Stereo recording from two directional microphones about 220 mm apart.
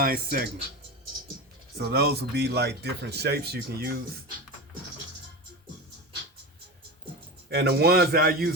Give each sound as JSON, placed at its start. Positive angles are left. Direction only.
{"t": 0.0, "sound": "speech", "side_deg": -40}
{"t": 1.8, "sound": "speech", "side_deg": -45}
{"t": 7.5, "sound": "speech", "side_deg": -50}